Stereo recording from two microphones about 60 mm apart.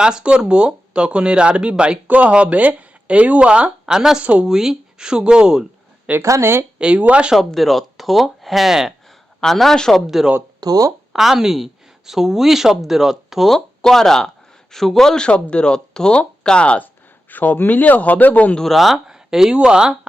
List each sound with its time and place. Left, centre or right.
0.0 s speech: centre
4.2 s speech: right
4.4 s speech: centre
6.4 s speech: right
6.7 s speech: centre
7.3 s speech: centre
9.0 s a sound: centre
10.6 s speech: right
11.1 s a woman's voice: centre
13.5 s speech: centre; by 18.5 s left
18.5 s speech: centre